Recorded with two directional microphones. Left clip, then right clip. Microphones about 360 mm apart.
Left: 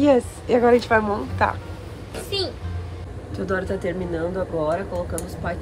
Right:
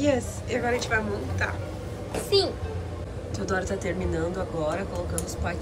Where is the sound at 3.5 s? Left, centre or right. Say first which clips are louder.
Left 4 dB; centre.